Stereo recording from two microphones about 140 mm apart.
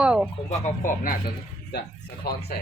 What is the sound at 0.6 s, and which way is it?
Speech, 70° left (ahead or behind).